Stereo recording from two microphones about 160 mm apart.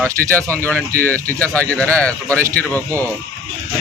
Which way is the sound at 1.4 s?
10° left (ahead or behind).